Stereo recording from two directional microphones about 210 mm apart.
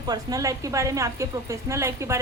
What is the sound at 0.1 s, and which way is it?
A woman's voice, 15° right (ahead or behind).